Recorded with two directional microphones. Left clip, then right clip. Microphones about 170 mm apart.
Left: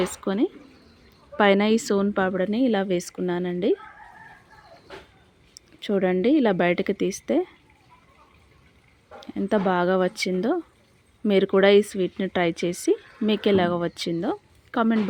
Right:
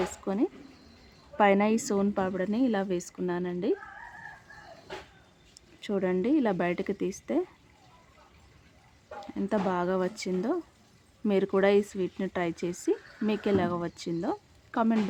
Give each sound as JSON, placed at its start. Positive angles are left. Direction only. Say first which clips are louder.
{"t": 0.0, "sound": "a woman's voice", "louder": "left 5 dB", "side_deg": 20}
{"t": 5.5, "sound": "a sound", "louder": "left 7 dB", "side_deg": 20}
{"t": 6.1, "sound": "speech", "louder": "left 6 dB", "side_deg": 20}
{"t": 9.2, "sound": "speech", "louder": "left 6 dB", "side_deg": 20}